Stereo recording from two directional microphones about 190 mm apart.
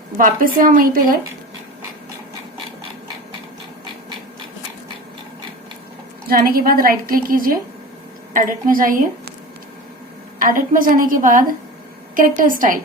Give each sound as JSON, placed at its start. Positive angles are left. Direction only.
{"t": 0.2, "sound": "a woman's voice", "side_deg": -45}
{"t": 6.2, "sound": "a woman's voice", "side_deg": -50}
{"t": 10.4, "sound": "a woman's voice", "side_deg": -45}